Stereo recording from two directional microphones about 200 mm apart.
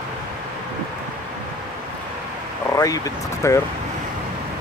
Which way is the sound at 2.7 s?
15° left (ahead or behind).